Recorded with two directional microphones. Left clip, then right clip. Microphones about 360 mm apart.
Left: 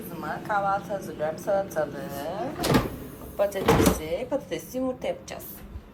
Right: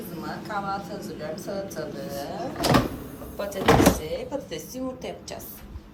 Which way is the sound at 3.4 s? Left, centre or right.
Centre.